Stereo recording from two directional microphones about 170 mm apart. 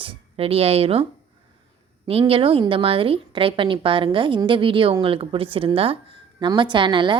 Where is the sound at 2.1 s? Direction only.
35° right (ahead or behind).